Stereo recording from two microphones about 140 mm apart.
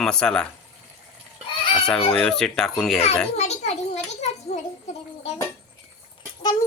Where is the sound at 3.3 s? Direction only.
50° left (ahead or behind).